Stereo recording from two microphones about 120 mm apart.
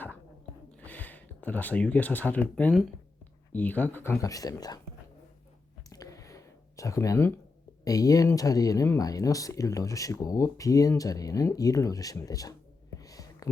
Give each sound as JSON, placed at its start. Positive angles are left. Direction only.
{"t": 0.8, "sound": "speech", "side_deg": 15}
{"t": 4.2, "sound": "speech", "side_deg": 30}
{"t": 5.9, "sound": "a sound", "side_deg": 30}
{"t": 7.9, "sound": "speech", "side_deg": 30}
{"t": 13.0, "sound": "whispering", "side_deg": 30}